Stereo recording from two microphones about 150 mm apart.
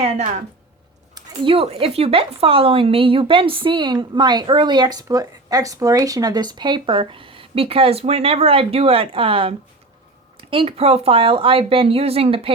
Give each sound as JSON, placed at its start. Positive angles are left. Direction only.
{"t": 1.1, "sound": "speech", "side_deg": -35}